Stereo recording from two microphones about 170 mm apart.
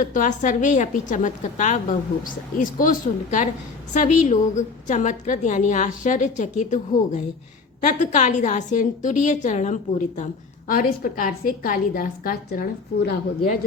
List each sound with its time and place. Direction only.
0.0 s a woman's voice: 50° left (ahead or behind)
10.7 s a woman's voice: 55° left (ahead or behind)